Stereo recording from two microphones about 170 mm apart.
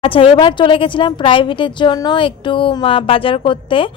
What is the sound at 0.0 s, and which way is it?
A woman's voice, 30° left (ahead or behind).